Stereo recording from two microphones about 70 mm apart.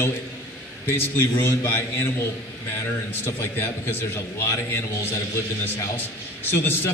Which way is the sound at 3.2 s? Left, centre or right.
Left.